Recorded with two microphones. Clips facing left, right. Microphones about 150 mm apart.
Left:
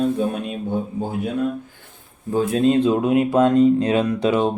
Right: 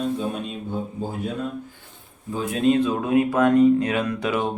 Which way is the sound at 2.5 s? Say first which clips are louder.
Left 2 dB; 30° left (ahead or behind).